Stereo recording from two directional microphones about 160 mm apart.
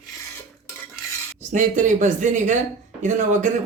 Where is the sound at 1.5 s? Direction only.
55° right (ahead or behind).